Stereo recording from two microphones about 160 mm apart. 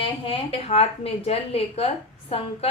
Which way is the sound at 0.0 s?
35° left (ahead or behind).